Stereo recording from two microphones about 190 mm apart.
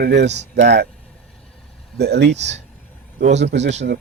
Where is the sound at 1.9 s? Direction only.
60° right (ahead or behind).